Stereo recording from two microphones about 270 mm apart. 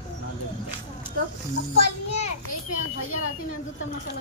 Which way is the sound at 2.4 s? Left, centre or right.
Left.